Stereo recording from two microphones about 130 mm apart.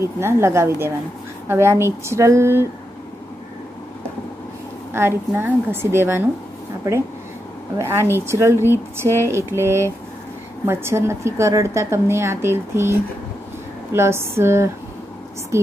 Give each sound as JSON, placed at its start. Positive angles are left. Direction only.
{"t": 0.0, "sound": "a woman's voice", "side_deg": -20}
{"t": 4.9, "sound": "a woman's voice", "side_deg": -20}
{"t": 7.7, "sound": "a woman's voice", "side_deg": -20}